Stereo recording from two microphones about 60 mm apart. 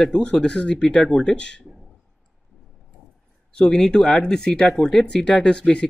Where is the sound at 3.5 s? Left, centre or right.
Centre.